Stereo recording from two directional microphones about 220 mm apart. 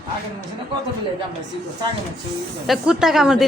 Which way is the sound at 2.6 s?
Centre (ahead or behind).